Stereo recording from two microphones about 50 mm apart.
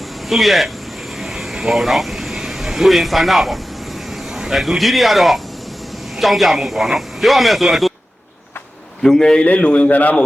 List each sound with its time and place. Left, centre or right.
0.3 s speech: centre
9.0 s a man's voice: centre
9.4 s a man's voice: left